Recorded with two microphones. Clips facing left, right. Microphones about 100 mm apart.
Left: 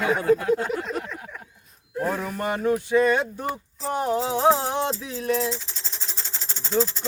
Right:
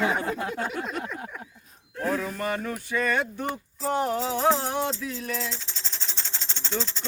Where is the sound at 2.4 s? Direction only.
25° left (ahead or behind).